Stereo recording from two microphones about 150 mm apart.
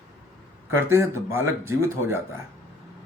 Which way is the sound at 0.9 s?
20° right (ahead or behind).